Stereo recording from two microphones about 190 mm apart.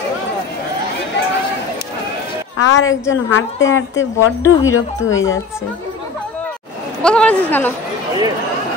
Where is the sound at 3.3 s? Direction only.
90° left.